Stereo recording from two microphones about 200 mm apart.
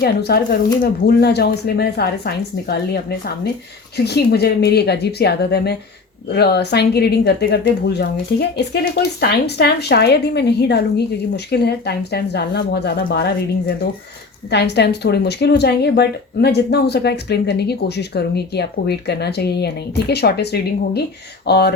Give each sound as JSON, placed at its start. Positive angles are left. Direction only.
{"t": 0.0, "sound": "speech", "side_deg": 55}